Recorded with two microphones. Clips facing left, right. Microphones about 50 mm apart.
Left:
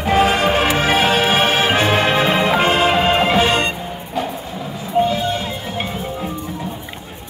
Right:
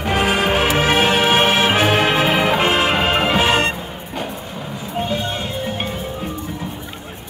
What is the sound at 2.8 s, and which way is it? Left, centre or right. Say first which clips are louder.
Music: left 2 dB; centre.